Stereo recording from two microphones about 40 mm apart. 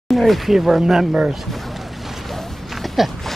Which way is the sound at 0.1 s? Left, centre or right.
Centre.